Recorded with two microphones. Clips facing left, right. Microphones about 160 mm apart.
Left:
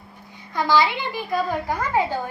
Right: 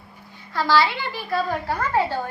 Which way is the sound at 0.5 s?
15° left (ahead or behind).